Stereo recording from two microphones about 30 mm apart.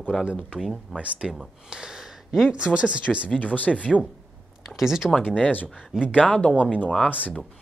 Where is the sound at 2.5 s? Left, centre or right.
Right.